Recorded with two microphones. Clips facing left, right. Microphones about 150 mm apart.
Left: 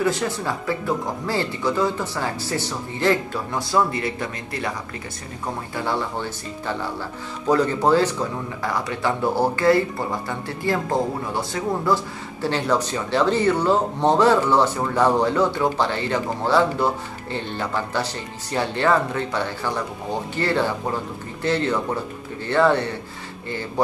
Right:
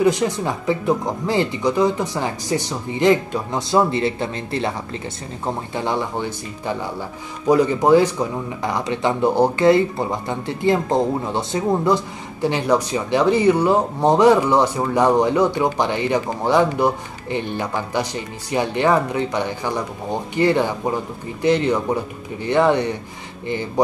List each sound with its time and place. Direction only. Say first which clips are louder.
0.0 s speech: right 5 dB; 15° right (ahead or behind)